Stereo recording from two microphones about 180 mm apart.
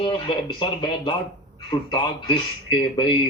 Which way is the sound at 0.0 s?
30° left (ahead or behind).